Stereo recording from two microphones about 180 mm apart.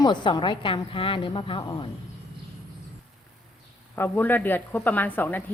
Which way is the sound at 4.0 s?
10° left (ahead or behind).